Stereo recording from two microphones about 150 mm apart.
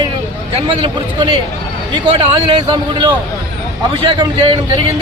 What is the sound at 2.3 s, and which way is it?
Speech, 35° right (ahead or behind).